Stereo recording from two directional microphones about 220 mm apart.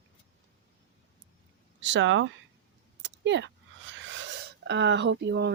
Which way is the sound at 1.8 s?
55° right (ahead or behind).